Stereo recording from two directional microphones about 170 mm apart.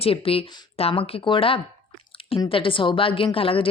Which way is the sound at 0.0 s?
35° left (ahead or behind).